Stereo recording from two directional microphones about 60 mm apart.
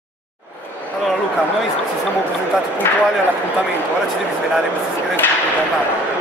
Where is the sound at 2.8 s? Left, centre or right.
Left.